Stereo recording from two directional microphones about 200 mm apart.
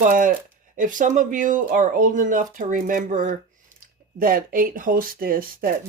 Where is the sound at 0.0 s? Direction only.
40° right (ahead or behind).